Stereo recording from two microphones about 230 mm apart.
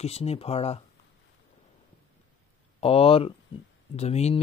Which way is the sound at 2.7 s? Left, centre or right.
Left.